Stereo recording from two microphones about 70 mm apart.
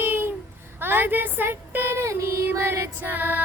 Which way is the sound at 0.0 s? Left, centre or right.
Right.